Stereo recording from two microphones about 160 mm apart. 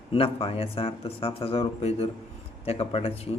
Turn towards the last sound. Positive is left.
turn(degrees=40)  # may be behind; listen again after turning